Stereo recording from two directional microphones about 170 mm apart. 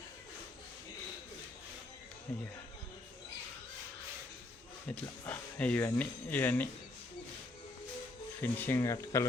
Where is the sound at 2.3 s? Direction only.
10° left (ahead or behind).